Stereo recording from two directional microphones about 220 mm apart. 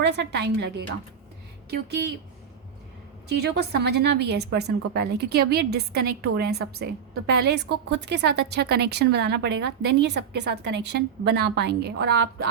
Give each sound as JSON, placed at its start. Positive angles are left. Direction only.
{"t": 0.0, "sound": "a woman's voice", "side_deg": -50}
{"t": 3.2, "sound": "a woman's voice", "side_deg": -50}